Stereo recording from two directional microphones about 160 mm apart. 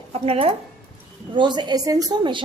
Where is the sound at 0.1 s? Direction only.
40° right (ahead or behind).